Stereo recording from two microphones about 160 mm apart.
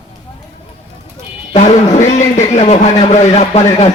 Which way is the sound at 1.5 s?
50° left (ahead or behind).